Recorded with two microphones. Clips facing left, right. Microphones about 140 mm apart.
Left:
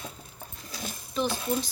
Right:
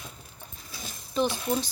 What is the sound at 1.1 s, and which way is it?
Speech, centre (ahead or behind).